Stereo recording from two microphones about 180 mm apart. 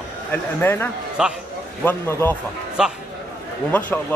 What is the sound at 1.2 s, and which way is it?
Speech, 5° right (ahead or behind).